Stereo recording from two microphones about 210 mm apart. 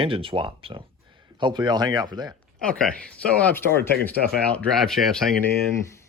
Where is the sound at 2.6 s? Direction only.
5° left (ahead or behind).